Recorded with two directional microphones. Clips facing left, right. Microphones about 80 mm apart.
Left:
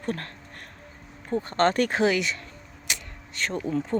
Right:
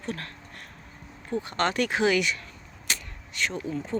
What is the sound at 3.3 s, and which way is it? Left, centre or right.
Speech, left.